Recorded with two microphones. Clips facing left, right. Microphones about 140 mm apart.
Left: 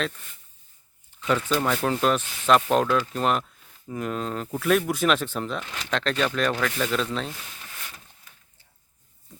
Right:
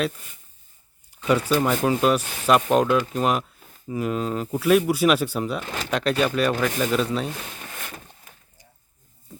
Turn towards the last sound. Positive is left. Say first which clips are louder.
# right 6 dB
turn(degrees=-55)  # may be behind; listen again after turning